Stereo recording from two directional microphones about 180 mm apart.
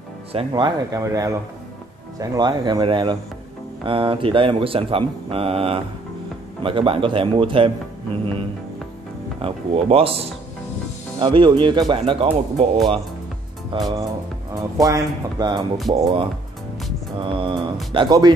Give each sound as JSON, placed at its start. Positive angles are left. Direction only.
{"t": 0.3, "sound": "speech", "side_deg": -30}
{"t": 9.4, "sound": "speech", "side_deg": -30}
{"t": 13.7, "sound": "speech", "side_deg": -20}
{"t": 17.2, "sound": "a sound", "side_deg": -30}
{"t": 17.9, "sound": "speech", "side_deg": -25}